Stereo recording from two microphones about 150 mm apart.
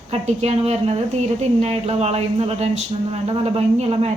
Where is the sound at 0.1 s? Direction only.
45° right (ahead or behind).